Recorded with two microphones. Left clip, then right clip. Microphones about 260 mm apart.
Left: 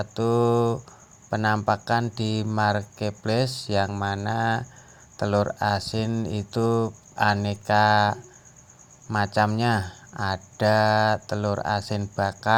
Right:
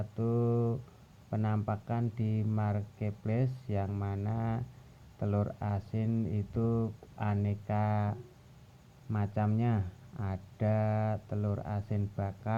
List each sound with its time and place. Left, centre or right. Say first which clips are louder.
0.2 s speech: left 11 dB; left